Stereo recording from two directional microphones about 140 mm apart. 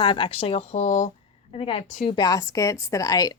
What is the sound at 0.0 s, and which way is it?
Speech, 35° left (ahead or behind).